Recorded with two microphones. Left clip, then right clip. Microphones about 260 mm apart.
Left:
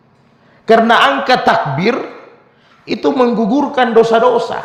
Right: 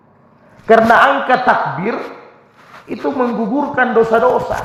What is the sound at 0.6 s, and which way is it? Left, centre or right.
A man's voice, left.